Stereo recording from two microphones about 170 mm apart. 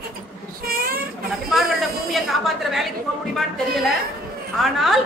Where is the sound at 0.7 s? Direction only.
60° right (ahead or behind).